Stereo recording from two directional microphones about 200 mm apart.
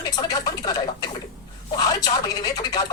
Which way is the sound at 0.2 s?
20° left (ahead or behind).